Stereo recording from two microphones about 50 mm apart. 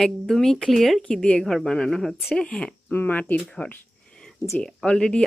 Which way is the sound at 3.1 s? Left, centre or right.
Left.